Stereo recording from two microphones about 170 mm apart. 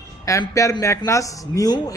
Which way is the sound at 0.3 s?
20° left (ahead or behind).